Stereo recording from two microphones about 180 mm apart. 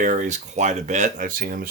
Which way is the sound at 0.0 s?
45° right (ahead or behind).